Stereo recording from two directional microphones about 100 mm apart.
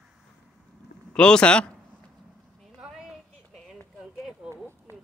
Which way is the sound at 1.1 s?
10° left (ahead or behind).